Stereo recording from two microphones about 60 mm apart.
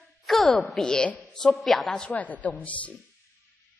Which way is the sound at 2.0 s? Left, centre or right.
Left.